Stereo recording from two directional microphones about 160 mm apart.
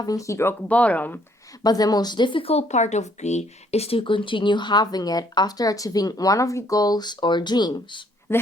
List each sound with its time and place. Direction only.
0.0 s speech: 20° left (ahead or behind)
1.6 s speech: 25° left (ahead or behind)